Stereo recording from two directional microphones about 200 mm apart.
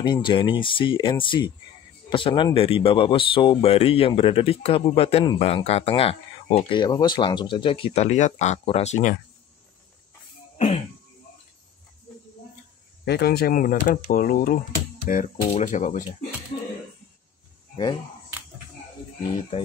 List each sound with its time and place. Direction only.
0.0 s speech: 25° left (ahead or behind)
13.0 s speech: 55° left (ahead or behind); by 16.0 s 40° left (ahead or behind)